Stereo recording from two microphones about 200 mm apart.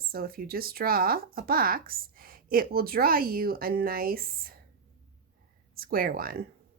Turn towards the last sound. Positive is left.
turn(degrees=-45)  # may be behind; listen again after turning